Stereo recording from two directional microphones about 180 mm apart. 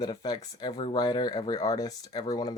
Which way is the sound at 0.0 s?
25° left (ahead or behind).